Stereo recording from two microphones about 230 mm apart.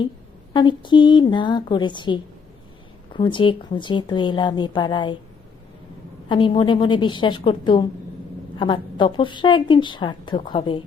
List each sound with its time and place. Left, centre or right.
0.5 s a woman's voice: left
6.2 s a woman's voice: left